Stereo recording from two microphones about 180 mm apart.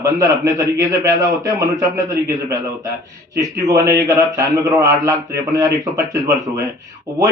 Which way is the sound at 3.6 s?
20° right (ahead or behind).